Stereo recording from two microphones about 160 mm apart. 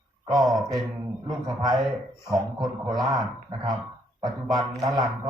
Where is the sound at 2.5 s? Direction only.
25° right (ahead or behind).